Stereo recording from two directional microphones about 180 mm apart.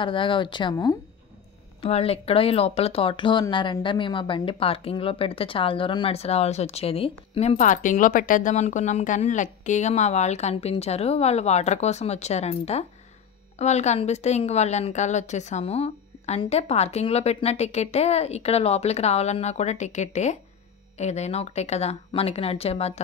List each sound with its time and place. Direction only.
0.0 s speech: 30° left (ahead or behind)
1.8 s speech: 35° left (ahead or behind)